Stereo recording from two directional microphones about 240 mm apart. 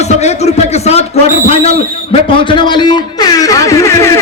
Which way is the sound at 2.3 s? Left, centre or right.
Centre.